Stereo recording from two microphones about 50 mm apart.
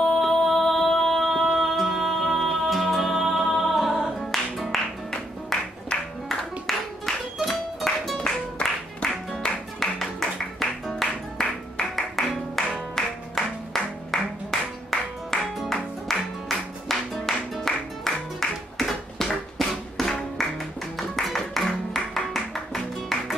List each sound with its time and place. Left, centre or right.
0.2 s music: centre
6.7 s music: centre
8.2 s music: left
9.4 s music: centre